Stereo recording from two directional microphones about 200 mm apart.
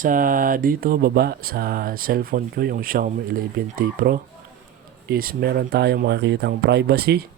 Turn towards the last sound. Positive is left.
turn(degrees=-50)  # may be behind; listen again after turning